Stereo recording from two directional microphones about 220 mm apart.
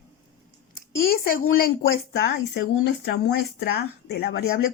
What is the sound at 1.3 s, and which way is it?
Speech, 40° left (ahead or behind).